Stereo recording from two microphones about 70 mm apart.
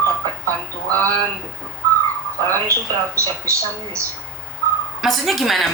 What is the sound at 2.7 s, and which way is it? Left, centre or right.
Speech, right.